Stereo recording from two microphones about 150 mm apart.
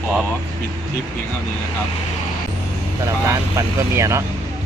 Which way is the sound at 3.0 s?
20° right (ahead or behind).